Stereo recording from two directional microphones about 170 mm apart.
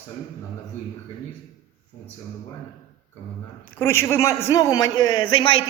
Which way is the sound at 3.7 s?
15° left (ahead or behind).